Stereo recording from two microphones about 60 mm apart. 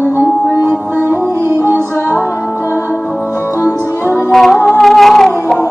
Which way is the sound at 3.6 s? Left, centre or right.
Left.